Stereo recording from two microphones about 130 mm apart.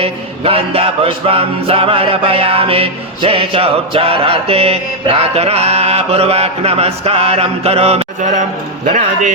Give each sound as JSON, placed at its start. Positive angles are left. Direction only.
{"t": 0.0, "sound": "a sound", "side_deg": -45}
{"t": 1.3, "sound": "music", "side_deg": -50}
{"t": 8.9, "sound": "speech", "side_deg": -70}